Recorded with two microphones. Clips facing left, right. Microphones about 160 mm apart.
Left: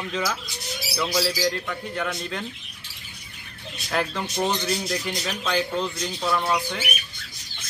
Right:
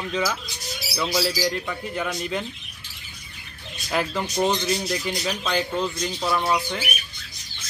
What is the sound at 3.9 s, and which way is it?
Speech, 5° right (ahead or behind).